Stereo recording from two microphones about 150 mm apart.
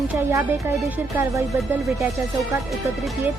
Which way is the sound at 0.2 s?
20° right (ahead or behind).